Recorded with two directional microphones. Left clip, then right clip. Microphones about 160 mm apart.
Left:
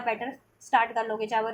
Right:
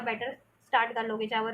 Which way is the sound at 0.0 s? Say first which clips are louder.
Left 3 dB; 45° left (ahead or behind).